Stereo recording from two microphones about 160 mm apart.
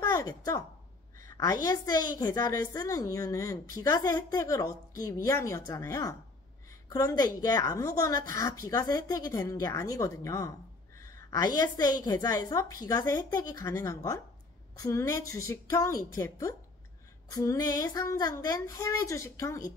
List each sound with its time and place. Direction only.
1.2 s a woman's voice: 20° left (ahead or behind)